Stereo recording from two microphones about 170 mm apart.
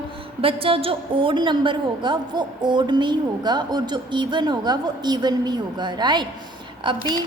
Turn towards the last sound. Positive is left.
turn(degrees=-30)  # may be behind; listen again after turning